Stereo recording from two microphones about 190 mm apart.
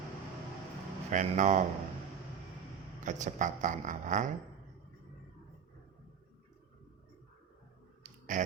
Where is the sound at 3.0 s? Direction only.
40° right (ahead or behind).